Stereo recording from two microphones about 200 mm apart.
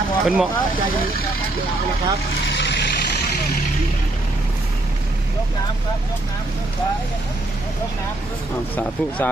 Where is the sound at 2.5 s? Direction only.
60° left (ahead or behind).